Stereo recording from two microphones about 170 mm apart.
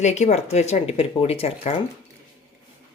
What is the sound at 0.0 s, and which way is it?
Speech, 40° left (ahead or behind).